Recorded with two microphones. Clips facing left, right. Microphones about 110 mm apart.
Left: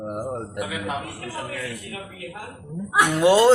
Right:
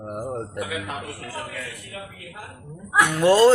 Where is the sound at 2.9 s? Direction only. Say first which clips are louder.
Even; 20° left (ahead or behind).